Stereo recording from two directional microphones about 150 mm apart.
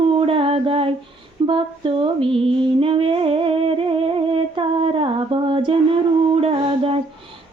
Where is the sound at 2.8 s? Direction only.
35° right (ahead or behind).